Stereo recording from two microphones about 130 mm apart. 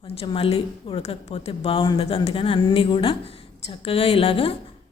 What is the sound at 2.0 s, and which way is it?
A woman's voice, 50° left (ahead or behind).